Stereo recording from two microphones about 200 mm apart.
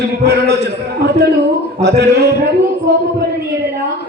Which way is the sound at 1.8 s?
55° right (ahead or behind).